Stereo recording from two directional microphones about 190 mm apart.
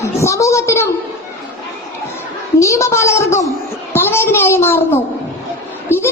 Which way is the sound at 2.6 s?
15° left (ahead or behind).